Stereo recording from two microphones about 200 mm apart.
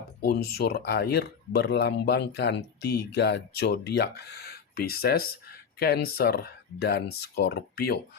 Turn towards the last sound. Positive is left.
turn(degrees=50)  # may be behind; listen again after turning